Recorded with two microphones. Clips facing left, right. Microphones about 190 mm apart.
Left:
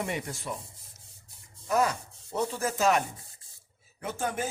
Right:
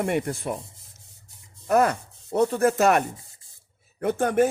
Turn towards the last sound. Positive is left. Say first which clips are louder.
# right 11 dB
turn(degrees=-60)  # may be behind; listen again after turning